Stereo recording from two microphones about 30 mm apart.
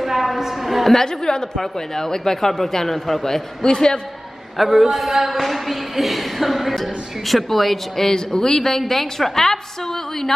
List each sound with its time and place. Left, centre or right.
0.0 s a sound: centre
1.0 s a woman's voice: left
3.6 s a woman's voice: left
4.6 s a woman's voice: centre